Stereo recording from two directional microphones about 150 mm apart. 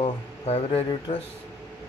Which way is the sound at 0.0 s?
40° left (ahead or behind).